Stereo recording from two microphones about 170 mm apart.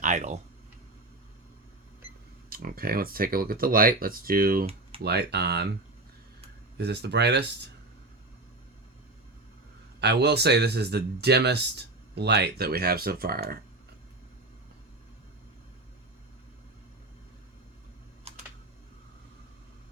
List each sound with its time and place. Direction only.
0.0 s speech: 45° right (ahead or behind)
2.5 s speech: 60° right (ahead or behind)
5.0 s speech: 75° right (ahead or behind)
6.7 s speech: 80° right
10.0 s speech: 80° right; by 13.6 s 60° right (ahead or behind)
18.3 s typing: 35° right (ahead or behind)